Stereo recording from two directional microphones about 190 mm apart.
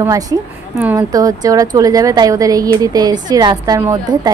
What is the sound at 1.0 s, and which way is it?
A woman's voice, 20° right (ahead or behind).